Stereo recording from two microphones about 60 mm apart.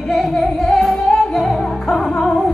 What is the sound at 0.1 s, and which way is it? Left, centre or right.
Music, centre.